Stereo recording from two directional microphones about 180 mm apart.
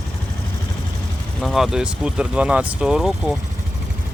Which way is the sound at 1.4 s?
Centre (ahead or behind).